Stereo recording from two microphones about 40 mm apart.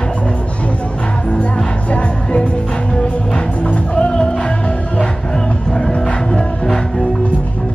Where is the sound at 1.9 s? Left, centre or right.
Left; by 7.1 s centre.